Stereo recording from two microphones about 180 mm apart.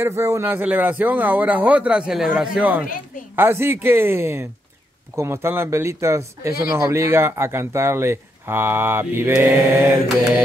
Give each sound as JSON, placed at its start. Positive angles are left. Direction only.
{"t": 0.0, "sound": "speech", "side_deg": -15}